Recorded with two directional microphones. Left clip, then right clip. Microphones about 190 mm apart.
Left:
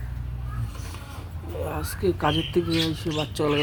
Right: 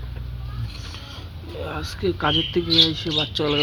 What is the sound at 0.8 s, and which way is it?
Vehicle, 15° left (ahead or behind).